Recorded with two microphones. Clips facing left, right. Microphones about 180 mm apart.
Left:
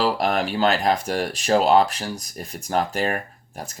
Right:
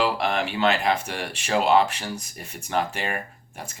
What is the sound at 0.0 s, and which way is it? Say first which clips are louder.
Speech: left 2 dB; 40° left (ahead or behind).